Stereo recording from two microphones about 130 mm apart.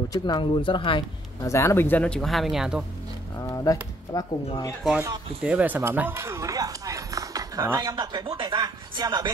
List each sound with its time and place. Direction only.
0.1 s speech: 35° left (ahead or behind)
1.4 s speech: 25° left (ahead or behind); by 2.8 s 5° right (ahead or behind)
3.3 s speech: 25° left (ahead or behind)
5.4 s speech: 10° right (ahead or behind); by 9.3 s 30° right (ahead or behind)